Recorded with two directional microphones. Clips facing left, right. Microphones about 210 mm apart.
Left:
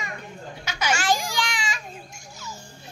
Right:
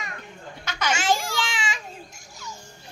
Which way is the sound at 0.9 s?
25° right (ahead or behind).